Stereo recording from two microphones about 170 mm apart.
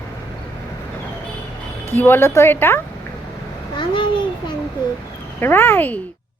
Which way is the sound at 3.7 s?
30° left (ahead or behind).